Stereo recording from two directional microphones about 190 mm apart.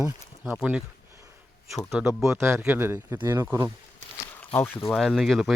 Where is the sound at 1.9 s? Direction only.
5° right (ahead or behind).